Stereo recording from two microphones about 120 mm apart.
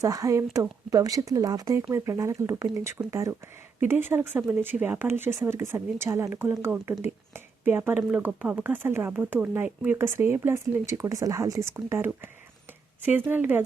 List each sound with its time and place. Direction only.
0.0 s speech: 30° right (ahead or behind)